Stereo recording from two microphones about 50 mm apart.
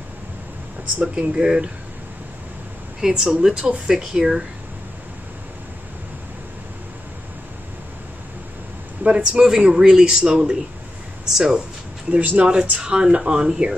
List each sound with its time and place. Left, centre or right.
1.0 s a man's voice: centre
3.0 s a man's voice: centre
9.0 s a man's voice: right
12.1 s a man's voice: right